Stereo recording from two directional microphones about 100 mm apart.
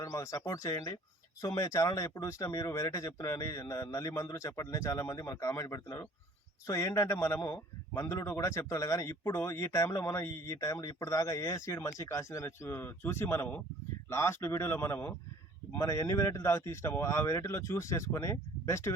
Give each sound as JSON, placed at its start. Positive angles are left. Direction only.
{"t": 0.0, "sound": "speech", "side_deg": 35}